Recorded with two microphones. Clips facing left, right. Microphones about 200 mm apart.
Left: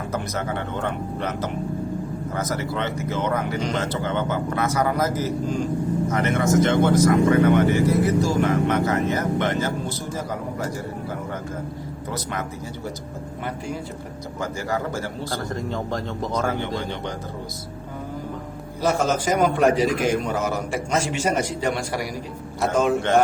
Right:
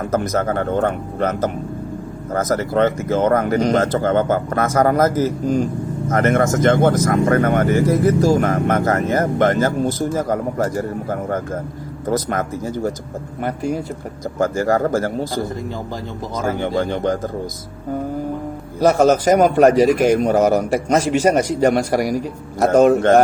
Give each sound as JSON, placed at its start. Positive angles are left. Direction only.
{"t": 0.1, "sound": "speech", "side_deg": -45}
{"t": 14.3, "sound": "speech", "side_deg": -45}
{"t": 16.6, "sound": "speech", "side_deg": -50}
{"t": 18.8, "sound": "a man's voice", "side_deg": -40}
{"t": 22.7, "sound": "speech", "side_deg": -60}